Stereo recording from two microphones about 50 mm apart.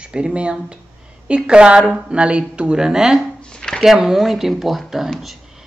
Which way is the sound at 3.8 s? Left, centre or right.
Centre.